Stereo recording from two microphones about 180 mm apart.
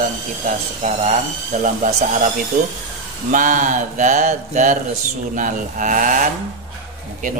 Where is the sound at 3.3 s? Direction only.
45° right (ahead or behind).